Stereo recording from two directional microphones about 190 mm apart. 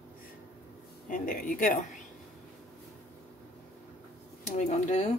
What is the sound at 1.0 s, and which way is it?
Speech, 45° left (ahead or behind).